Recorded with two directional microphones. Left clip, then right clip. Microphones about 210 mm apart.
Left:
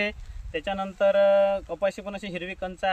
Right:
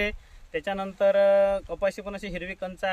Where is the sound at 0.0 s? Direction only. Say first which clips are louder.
Even; 15° right (ahead or behind).